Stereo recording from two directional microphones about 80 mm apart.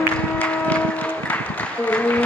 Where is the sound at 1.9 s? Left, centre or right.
Centre.